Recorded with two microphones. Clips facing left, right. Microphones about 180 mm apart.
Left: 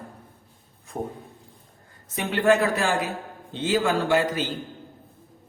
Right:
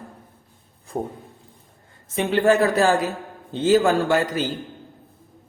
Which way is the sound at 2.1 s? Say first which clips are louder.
Right 3 dB; 30° right (ahead or behind).